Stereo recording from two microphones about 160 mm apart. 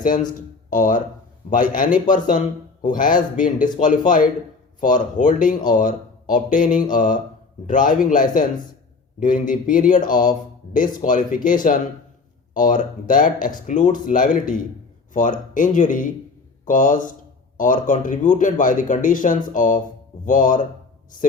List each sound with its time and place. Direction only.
0.7 s speech: 55° left (ahead or behind)